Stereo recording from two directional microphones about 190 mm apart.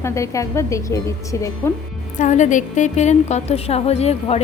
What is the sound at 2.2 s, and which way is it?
A woman's voice, 40° left (ahead or behind).